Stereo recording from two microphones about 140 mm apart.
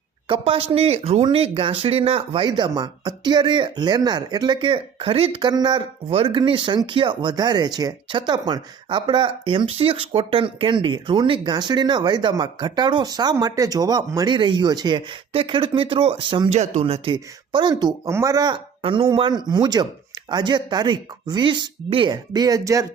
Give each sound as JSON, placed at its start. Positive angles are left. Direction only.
{"t": 0.3, "sound": "speech", "side_deg": -40}
{"t": 6.1, "sound": "speech", "side_deg": -40}
{"t": 16.5, "sound": "speech", "side_deg": -55}